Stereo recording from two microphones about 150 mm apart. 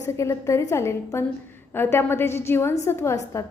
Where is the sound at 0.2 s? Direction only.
20° left (ahead or behind).